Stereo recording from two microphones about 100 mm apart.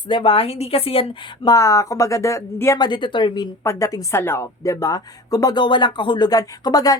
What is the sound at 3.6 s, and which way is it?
Speech, 30° left (ahead or behind).